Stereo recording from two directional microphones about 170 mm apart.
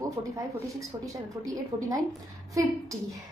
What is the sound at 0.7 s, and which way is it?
A woman's voice, 20° right (ahead or behind).